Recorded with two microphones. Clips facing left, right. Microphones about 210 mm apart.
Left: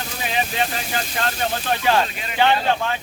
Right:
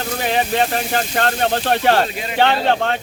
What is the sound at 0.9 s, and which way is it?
Speech, 55° right (ahead or behind).